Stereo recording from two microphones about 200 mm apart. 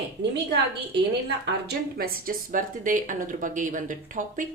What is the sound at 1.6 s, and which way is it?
A woman's voice, 45° right (ahead or behind).